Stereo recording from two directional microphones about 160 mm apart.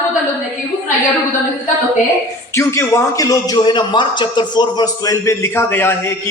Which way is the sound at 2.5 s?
15° left (ahead or behind).